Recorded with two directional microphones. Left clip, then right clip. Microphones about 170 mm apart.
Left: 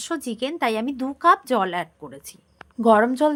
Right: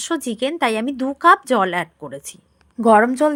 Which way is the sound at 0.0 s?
25° right (ahead or behind).